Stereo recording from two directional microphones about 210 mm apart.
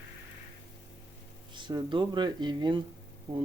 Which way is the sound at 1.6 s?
20° right (ahead or behind).